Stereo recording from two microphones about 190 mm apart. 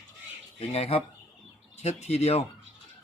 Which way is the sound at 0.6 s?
30° left (ahead or behind).